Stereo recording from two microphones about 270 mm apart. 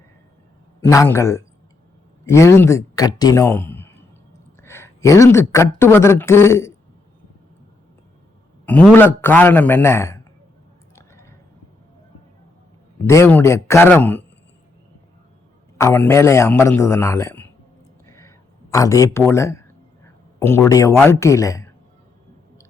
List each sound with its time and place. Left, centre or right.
0.8 s speech: centre
8.6 s speech: centre
10.9 s a sound: centre
13.1 s speech: centre
15.8 s speech: centre
18.0 s a sound: centre
19.3 s speech: centre